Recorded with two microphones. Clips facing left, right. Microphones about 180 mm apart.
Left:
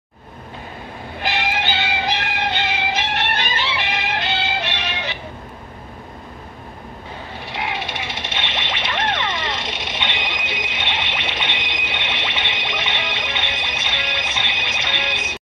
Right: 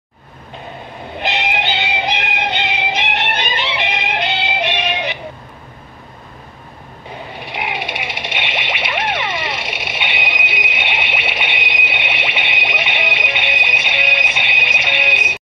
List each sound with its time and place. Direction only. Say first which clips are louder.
1.1 s music: right 2 dB; 20° right (ahead or behind)
7.3 s music: right 2 dB; 15° right (ahead or behind)